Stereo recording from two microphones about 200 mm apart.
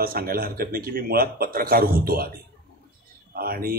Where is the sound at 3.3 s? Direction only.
50° right (ahead or behind).